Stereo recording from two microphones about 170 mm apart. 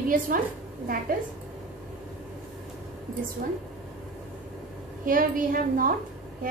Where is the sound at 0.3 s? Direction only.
55° right (ahead or behind).